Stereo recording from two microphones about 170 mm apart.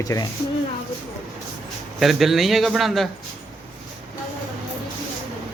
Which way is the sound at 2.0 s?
Centre (ahead or behind).